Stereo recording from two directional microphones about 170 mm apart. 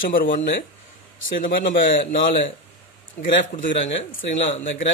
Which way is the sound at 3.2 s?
50° left (ahead or behind).